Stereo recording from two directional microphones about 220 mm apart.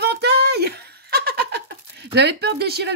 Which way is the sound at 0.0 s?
50° right (ahead or behind).